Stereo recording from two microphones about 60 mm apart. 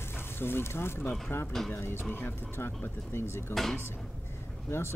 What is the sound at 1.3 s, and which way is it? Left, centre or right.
Speech, left.